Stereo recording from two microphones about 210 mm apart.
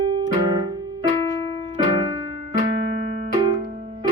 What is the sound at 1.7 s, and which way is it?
Piano, 25° right (ahead or behind).